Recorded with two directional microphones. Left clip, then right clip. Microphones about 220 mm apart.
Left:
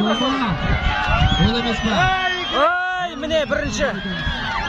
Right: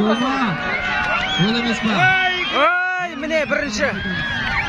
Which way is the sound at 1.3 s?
50° right (ahead or behind).